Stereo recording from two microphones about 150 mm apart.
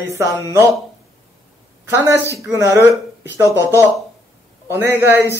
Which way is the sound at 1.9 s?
20° right (ahead or behind).